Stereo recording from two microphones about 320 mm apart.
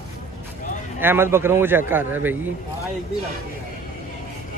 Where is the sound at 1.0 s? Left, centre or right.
Centre.